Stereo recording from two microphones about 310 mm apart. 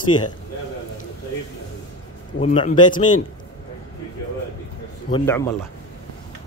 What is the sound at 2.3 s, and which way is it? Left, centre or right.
Speech, left.